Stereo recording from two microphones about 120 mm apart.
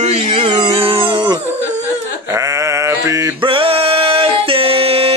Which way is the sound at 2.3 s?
25° right (ahead or behind).